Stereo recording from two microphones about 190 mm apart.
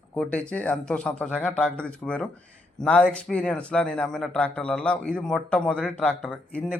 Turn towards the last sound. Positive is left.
turn(degrees=5)  # may be behind; listen again after turning